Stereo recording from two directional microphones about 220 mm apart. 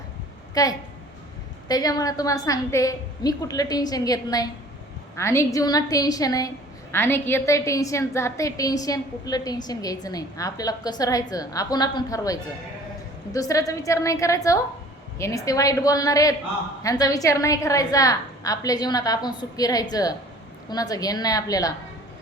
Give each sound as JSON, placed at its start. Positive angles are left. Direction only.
{"t": 0.5, "sound": "a woman's voice", "side_deg": 15}